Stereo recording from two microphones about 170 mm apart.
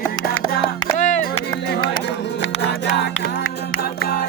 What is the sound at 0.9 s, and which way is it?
Music, 45° left (ahead or behind).